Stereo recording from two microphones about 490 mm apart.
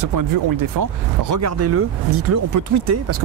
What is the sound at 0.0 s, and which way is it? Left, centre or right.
Speech, right.